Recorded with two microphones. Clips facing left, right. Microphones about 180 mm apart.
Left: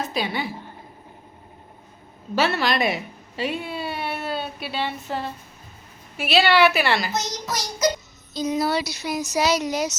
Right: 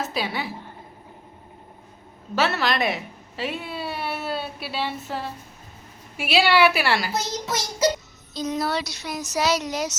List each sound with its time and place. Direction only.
0.0 s a woman's voice: 5° right (ahead or behind)
2.3 s a woman's voice: centre (ahead or behind)
7.1 s child singing: 25° right (ahead or behind)
8.3 s speech: centre (ahead or behind)